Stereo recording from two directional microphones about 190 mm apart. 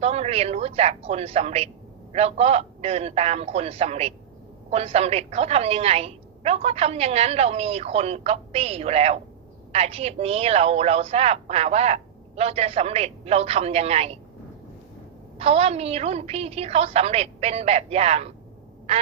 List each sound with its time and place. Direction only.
0.0 s a woman's voice: 30° right (ahead or behind)
15.4 s a woman's voice: 30° right (ahead or behind)